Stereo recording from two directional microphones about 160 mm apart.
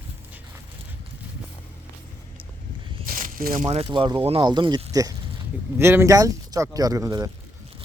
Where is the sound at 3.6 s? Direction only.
35° right (ahead or behind); by 7.3 s 20° right (ahead or behind).